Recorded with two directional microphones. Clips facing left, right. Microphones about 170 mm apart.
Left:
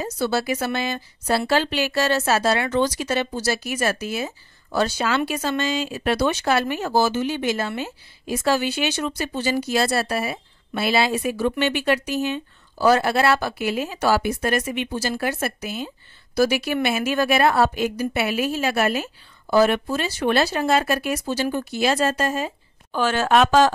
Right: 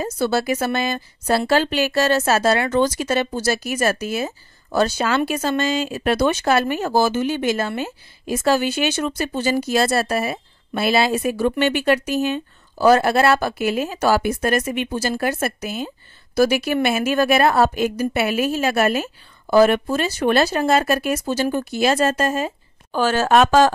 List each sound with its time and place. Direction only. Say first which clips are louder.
0.0 s a woman's voice: right 3 dB; 50° right (ahead or behind)